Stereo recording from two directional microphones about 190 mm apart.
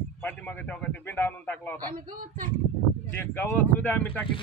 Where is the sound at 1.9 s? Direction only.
45° right (ahead or behind).